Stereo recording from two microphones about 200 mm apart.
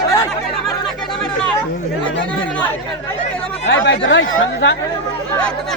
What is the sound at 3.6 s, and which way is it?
Speech, 65° left (ahead or behind).